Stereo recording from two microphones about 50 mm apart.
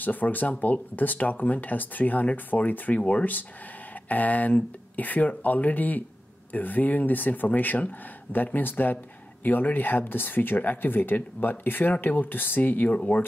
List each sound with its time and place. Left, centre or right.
0.0 s speech: left